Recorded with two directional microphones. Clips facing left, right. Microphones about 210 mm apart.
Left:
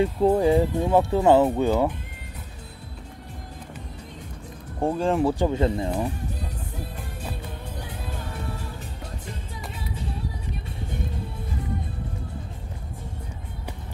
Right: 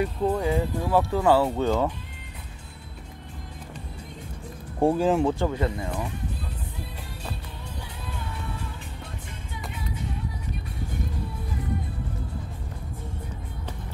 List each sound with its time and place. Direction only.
0.0 s speech: 30° left (ahead or behind); by 1.9 s 15° left (ahead or behind)
4.8 s speech: 5° right (ahead or behind)
5.2 s speech: 15° left (ahead or behind); by 6.1 s 30° left (ahead or behind)
8.1 s music: 45° left (ahead or behind)